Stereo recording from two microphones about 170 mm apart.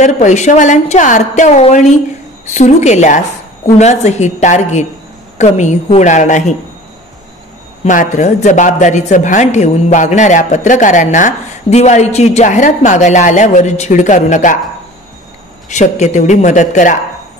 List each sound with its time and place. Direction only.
0.0 s a woman's voice: 45° left (ahead or behind)
7.8 s speech: 45° left (ahead or behind)
15.7 s speech: 45° left (ahead or behind)